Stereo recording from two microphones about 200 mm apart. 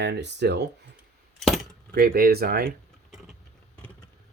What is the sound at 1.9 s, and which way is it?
Speech, 50° right (ahead or behind).